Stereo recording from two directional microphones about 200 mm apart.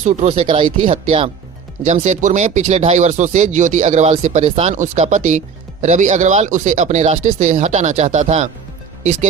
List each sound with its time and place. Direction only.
0.0 s speech: 30° right (ahead or behind)
1.8 s speech: 40° right (ahead or behind)